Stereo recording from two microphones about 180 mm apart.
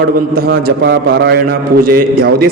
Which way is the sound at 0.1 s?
55° right (ahead or behind).